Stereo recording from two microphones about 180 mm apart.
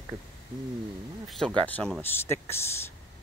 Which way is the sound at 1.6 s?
5° left (ahead or behind).